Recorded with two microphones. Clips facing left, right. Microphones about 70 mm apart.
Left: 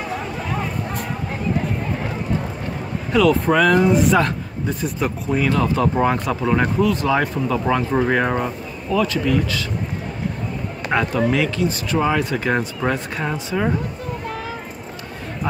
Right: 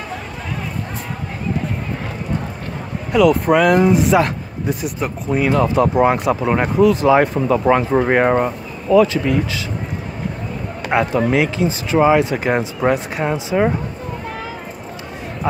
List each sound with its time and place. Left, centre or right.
3.1 s speech: centre
6.4 s speech: right
7.2 s speech: right
8.9 s speech: right
10.9 s speech: right